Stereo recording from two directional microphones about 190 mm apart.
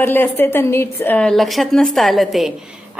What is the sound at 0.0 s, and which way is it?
A woman's voice, 10° left (ahead or behind).